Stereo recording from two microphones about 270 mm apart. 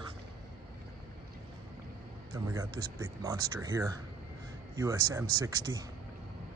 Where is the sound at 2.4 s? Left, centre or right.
Centre.